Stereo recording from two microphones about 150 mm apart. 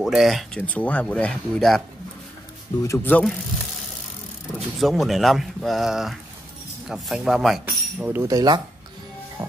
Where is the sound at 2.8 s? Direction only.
15° left (ahead or behind).